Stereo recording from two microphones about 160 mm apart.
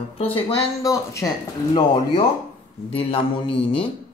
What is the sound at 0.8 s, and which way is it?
Speech, 20° left (ahead or behind).